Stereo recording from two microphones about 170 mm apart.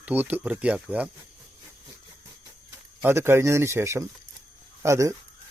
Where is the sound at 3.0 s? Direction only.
15° right (ahead or behind).